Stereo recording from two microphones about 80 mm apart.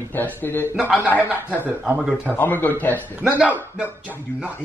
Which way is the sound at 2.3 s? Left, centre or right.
Left.